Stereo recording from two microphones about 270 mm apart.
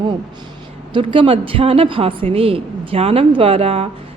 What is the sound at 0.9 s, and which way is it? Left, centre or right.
A woman's voice, centre.